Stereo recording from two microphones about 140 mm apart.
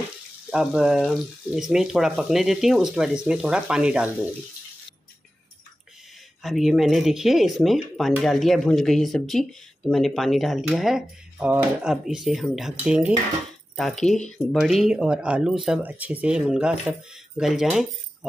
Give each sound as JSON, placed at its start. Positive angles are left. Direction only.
{"t": 0.5, "sound": "speech", "side_deg": -5}
{"t": 6.4, "sound": "speech", "side_deg": 0}
{"t": 13.7, "sound": "speech", "side_deg": 0}